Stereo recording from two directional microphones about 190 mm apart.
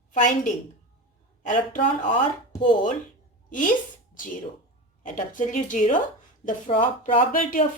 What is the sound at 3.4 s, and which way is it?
Speech, 45° left (ahead or behind).